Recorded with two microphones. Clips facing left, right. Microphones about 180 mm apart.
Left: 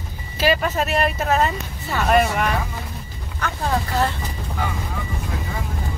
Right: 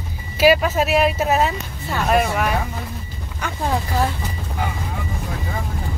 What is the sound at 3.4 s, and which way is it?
Speech, 15° right (ahead or behind).